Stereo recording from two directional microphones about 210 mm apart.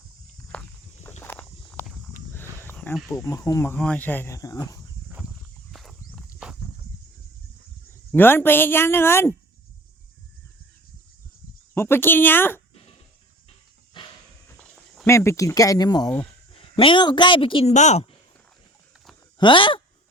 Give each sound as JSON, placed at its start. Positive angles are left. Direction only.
{"t": 0.5, "sound": "walk", "side_deg": 5}
{"t": 3.1, "sound": "speech", "side_deg": 15}
{"t": 5.7, "sound": "a sound", "side_deg": 0}
{"t": 7.9, "sound": "speech", "side_deg": 10}
{"t": 11.7, "sound": "speech", "side_deg": 10}
{"t": 14.6, "sound": "speech", "side_deg": 10}
{"t": 19.4, "sound": "speech", "side_deg": 25}